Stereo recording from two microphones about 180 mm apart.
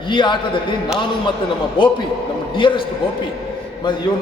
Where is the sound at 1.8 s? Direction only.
25° left (ahead or behind).